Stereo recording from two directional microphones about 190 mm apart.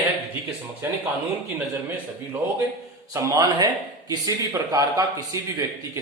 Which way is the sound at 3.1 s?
15° right (ahead or behind).